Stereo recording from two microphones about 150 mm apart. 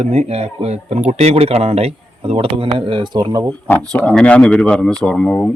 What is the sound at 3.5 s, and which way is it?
Speech, 10° left (ahead or behind).